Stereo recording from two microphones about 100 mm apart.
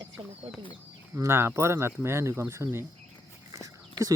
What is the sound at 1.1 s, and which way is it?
Speech, 25° right (ahead or behind).